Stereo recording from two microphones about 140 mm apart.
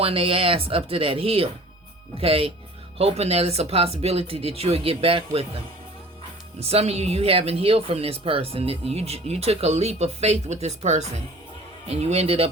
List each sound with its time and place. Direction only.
0.0 s speech: 40° right (ahead or behind)
6.6 s speech: 45° right (ahead or behind)